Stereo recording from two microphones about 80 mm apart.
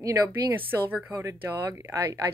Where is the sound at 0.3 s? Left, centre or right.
Right.